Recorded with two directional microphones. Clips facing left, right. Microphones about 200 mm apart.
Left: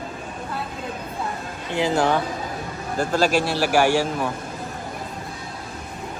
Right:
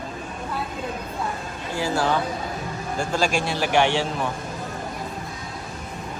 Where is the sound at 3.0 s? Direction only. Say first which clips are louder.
Left 4 dB; 5° left (ahead or behind).